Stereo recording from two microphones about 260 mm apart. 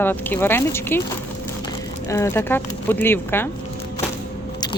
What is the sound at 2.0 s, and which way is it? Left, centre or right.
Speech, centre.